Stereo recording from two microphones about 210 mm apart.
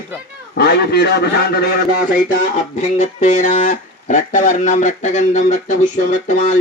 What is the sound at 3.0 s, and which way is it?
Speech, 35° left (ahead or behind).